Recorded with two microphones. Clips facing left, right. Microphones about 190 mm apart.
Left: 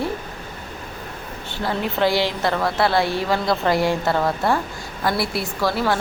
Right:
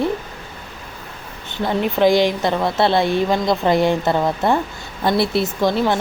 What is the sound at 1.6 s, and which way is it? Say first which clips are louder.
A woman's voice: right 5 dB; 20° right (ahead or behind).